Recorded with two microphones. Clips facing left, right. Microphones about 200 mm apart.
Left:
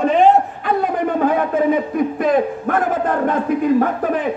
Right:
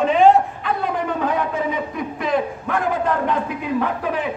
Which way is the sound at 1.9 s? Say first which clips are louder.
Left 6 dB; 50° left (ahead or behind).